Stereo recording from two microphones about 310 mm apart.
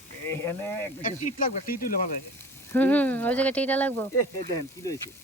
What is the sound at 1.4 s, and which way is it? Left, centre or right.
Speech, left.